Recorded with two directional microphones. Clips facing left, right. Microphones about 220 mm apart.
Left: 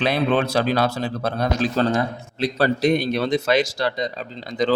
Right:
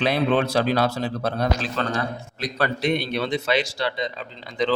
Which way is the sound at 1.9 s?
25° left (ahead or behind).